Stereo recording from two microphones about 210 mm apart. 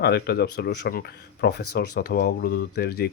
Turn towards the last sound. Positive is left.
turn(degrees=50)  # may be behind; listen again after turning